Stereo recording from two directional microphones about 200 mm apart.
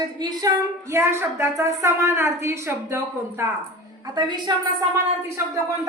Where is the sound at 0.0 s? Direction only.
20° right (ahead or behind).